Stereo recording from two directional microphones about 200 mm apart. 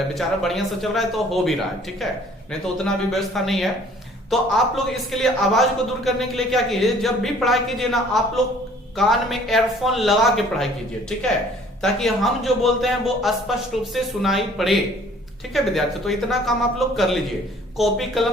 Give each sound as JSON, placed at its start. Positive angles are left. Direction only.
{"t": 0.1, "sound": "speech", "side_deg": 0}